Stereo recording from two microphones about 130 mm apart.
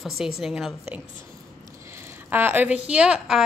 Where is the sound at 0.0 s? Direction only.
Centre (ahead or behind).